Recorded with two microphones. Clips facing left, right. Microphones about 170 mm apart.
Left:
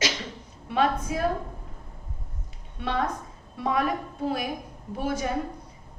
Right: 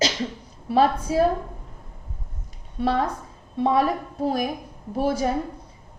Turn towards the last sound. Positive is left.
turn(degrees=-35)  # may be behind; listen again after turning